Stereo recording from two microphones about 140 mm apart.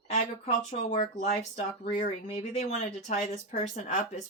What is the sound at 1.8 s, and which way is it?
Speech, 50° left (ahead or behind).